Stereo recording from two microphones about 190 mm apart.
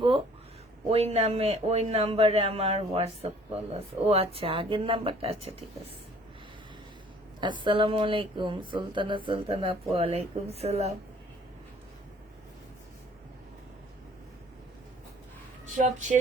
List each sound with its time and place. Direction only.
0.9 s speech: 30° right (ahead or behind)
7.4 s speech: 25° right (ahead or behind)
15.8 s speech: 40° right (ahead or behind)